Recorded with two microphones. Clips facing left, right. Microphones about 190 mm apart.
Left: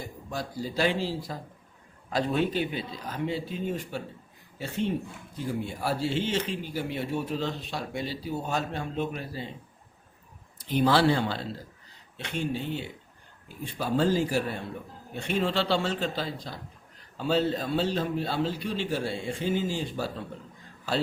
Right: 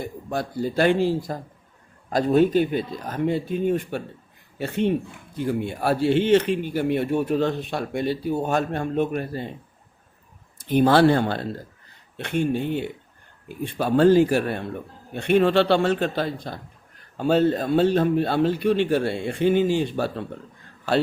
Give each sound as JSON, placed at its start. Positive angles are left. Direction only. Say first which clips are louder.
{"t": 0.0, "sound": "speech", "louder": "right 7 dB", "side_deg": -60}
{"t": 10.6, "sound": "speech", "louder": "right 6 dB", "side_deg": -50}